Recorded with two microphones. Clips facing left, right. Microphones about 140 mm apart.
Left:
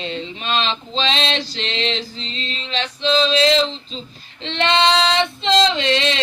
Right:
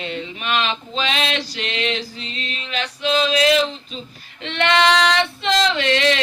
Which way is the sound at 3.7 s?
25° left (ahead or behind).